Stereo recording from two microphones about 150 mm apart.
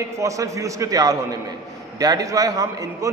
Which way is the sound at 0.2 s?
20° right (ahead or behind).